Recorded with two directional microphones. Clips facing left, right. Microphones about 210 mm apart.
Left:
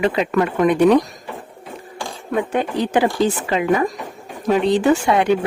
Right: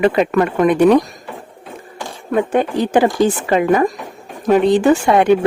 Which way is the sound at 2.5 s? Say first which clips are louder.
Right 4 dB; 45° right (ahead or behind).